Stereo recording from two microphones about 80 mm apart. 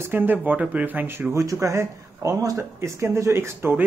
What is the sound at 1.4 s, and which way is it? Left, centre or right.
Speech, right.